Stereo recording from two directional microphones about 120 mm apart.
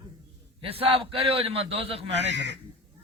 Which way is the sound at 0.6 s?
50° right (ahead or behind).